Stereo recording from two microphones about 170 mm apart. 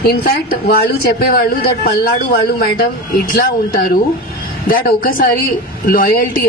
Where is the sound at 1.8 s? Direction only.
70° left (ahead or behind).